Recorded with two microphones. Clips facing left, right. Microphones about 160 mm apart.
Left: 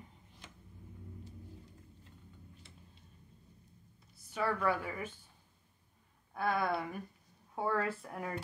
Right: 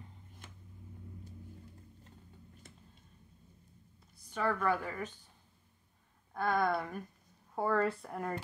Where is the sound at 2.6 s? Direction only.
45° right (ahead or behind).